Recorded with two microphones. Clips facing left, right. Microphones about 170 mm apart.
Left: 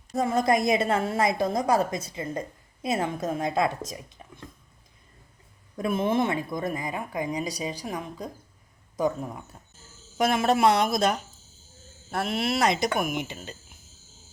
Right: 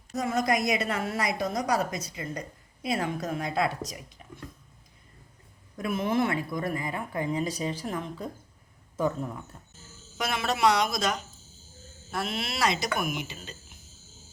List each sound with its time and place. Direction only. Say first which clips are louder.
0.1 s a woman's voice: left 4 dB; 30° left (ahead or behind)
5.7 s a woman's voice: left 3 dB; 25° left (ahead or behind)
10.2 s speech: left 6 dB; 50° left (ahead or behind)